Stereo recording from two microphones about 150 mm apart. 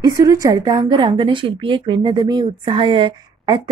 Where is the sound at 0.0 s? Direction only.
25° right (ahead or behind).